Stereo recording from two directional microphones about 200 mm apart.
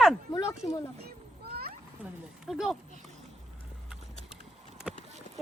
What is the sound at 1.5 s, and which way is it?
Cat, 50° right (ahead or behind).